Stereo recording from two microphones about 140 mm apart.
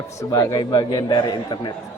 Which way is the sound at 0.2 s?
25° left (ahead or behind).